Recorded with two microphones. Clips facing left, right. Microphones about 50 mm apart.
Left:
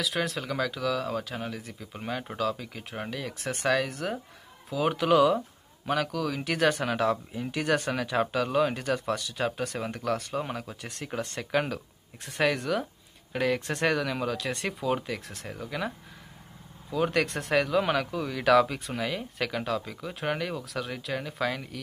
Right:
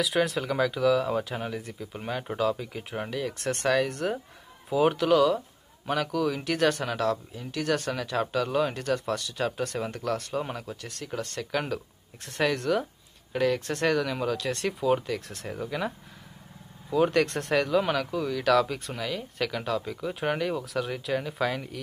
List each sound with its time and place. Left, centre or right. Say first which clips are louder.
0.0 s speech: right 4 dB; centre
4.9 s speech: even; centre
5.9 s speech: right 2 dB; centre
10.8 s speech: even; left; by 15.9 s centre
16.9 s speech: right 3 dB; centre